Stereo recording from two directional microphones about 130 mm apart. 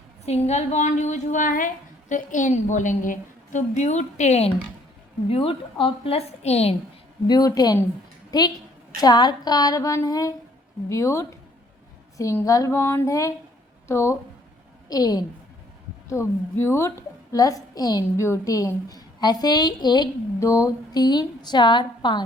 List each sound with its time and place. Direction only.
0.3 s a woman's voice: 55° left (ahead or behind)
5.3 s a woman's voice: 45° left (ahead or behind)
7.3 s a woman's voice: 30° left (ahead or behind)